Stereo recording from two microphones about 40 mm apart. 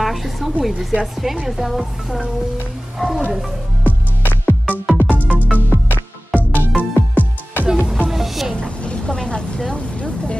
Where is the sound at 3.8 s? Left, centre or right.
Left.